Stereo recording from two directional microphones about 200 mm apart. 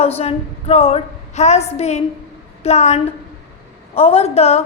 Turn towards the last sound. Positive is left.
turn(degrees=30)  # may be behind; listen again after turning